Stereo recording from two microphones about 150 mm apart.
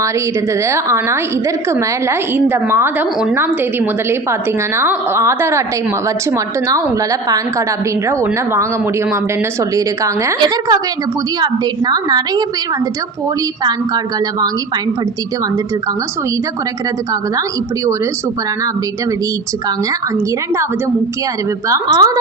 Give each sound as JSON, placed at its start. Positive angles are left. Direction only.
{"t": 0.6, "sound": "a woman's voice", "side_deg": -20}
{"t": 21.9, "sound": "a woman's voice", "side_deg": -25}